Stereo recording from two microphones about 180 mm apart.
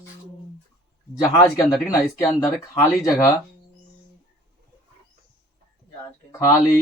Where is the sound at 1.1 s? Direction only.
20° left (ahead or behind).